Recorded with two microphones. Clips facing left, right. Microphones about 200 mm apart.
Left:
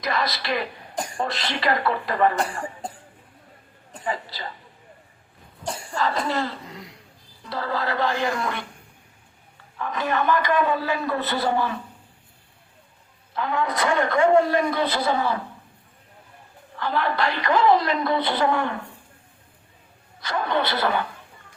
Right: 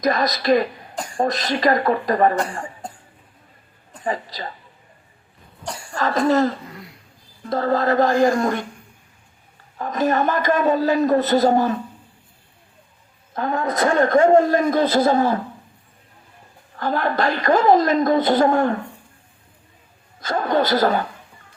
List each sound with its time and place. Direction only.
0.0 s speech: 45° right (ahead or behind)
4.0 s speech: 40° right (ahead or behind)
5.9 s a woman's voice: 45° right (ahead or behind)
9.7 s a woman's voice: 40° right (ahead or behind)
13.3 s a woman's voice: 45° right (ahead or behind)
16.7 s a woman's voice: 45° right (ahead or behind)
20.1 s a man's voice: 45° right (ahead or behind)